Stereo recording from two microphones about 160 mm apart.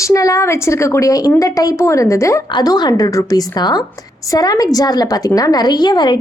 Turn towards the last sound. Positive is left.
turn(degrees=25)  # may be behind; listen again after turning